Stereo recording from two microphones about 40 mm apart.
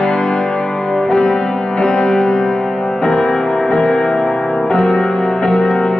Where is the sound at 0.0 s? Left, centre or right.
Centre.